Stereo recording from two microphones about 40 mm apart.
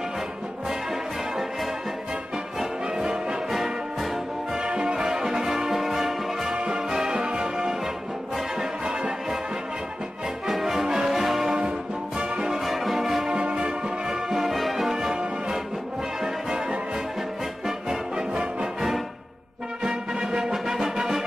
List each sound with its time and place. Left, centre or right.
2.6 s music: centre
3.4 s music: centre
4.6 s music: right
4.9 s music: centre
8.8 s music: right
10.4 s brass instrument: centre
12.2 s music: right
12.4 s music: centre
13.4 s music: right
13.7 s music: centre
16.2 s music: centre
16.5 s music: right
17.6 s music: centre
19.8 s music: centre